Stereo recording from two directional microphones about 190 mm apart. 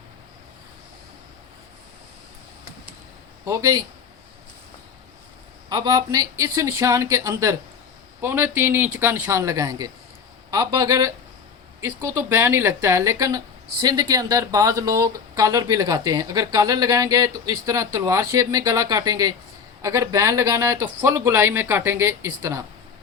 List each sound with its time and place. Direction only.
3.4 s speech: 15° right (ahead or behind)
5.6 s speech: 20° right (ahead or behind)